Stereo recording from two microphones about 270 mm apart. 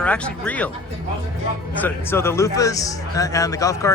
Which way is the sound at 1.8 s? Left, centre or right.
Centre.